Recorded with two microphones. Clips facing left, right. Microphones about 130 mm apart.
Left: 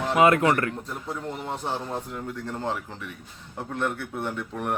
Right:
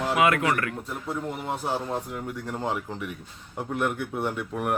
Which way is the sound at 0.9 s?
5° right (ahead or behind).